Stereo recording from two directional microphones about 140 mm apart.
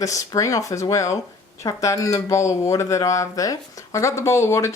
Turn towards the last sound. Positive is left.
turn(degrees=20)  # may be behind; listen again after turning